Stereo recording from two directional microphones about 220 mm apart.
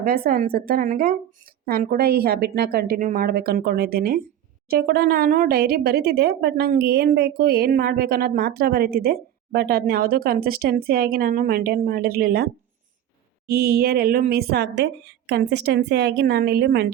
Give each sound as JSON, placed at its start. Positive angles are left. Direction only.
{"t": 0.0, "sound": "a woman's voice", "side_deg": -40}
{"t": 13.5, "sound": "speech", "side_deg": -45}